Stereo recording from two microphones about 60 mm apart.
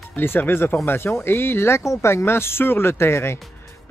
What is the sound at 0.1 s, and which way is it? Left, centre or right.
Speech, left.